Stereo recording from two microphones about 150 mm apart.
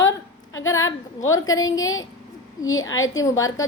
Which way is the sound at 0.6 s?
20° left (ahead or behind).